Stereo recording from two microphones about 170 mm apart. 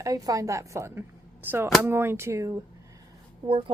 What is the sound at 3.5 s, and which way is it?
Speech, 35° right (ahead or behind).